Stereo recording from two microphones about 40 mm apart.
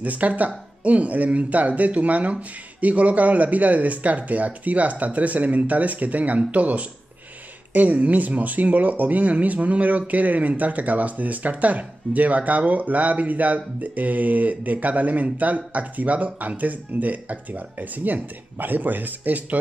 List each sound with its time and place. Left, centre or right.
0.0 s speech: right
7.7 s speech: right